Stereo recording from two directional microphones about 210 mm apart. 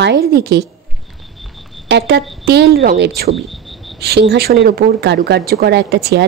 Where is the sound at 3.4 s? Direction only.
Centre (ahead or behind).